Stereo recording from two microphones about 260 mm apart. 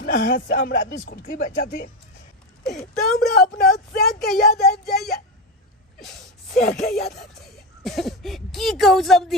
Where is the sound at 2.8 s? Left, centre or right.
Centre.